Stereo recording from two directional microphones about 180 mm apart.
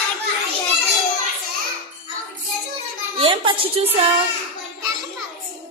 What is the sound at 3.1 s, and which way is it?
Speech, 30° right (ahead or behind).